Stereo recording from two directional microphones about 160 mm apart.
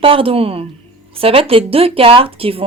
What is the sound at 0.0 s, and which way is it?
Speech, 35° right (ahead or behind).